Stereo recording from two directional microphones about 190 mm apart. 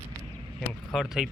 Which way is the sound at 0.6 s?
Centre (ahead or behind).